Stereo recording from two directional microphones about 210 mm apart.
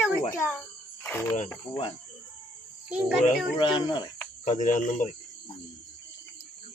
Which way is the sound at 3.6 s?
20° left (ahead or behind).